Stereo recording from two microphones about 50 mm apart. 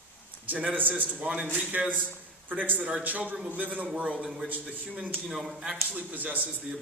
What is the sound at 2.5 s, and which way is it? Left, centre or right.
A man's voice, right.